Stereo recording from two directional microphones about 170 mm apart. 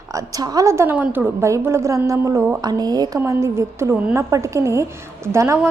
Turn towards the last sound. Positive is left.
turn(degrees=-15)  # may be behind; listen again after turning